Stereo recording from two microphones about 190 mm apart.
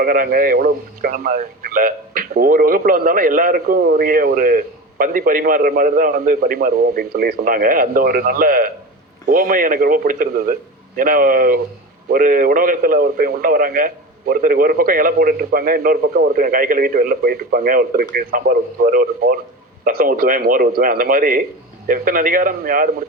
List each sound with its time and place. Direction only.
0.0 s speech: 50° right (ahead or behind)